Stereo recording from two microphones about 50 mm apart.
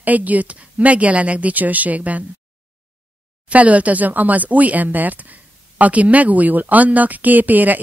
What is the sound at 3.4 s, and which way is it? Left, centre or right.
Speech, right.